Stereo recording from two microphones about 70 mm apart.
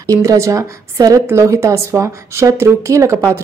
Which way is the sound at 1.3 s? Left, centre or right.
Right.